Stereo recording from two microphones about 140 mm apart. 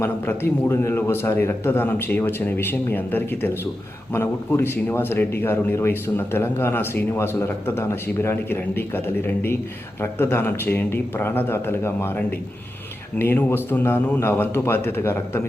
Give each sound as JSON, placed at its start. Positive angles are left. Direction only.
{"t": 0.0, "sound": "speech", "side_deg": 15}